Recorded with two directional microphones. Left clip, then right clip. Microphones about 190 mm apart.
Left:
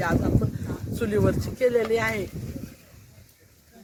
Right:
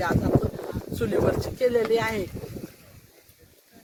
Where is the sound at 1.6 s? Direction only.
50° right (ahead or behind).